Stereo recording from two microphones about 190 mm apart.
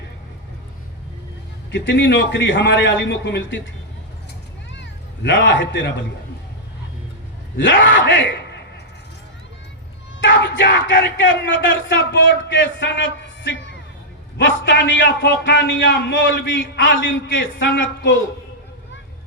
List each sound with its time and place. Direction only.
1.7 s a man's voice: 70° left (ahead or behind)
4.7 s cat: 70° left (ahead or behind)
7.5 s a man's voice: 75° left (ahead or behind)
10.2 s a sound: 75° left (ahead or behind)
10.9 s a man's voice: 65° left (ahead or behind); by 18.1 s 85° left